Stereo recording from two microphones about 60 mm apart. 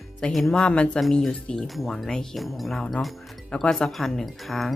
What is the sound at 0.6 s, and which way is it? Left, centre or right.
Speech, centre.